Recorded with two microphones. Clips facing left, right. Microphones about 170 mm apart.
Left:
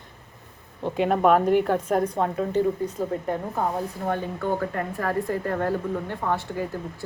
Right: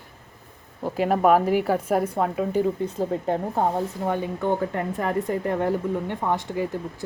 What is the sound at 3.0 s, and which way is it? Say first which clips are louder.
Speech: right 5 dB; 30° right (ahead or behind).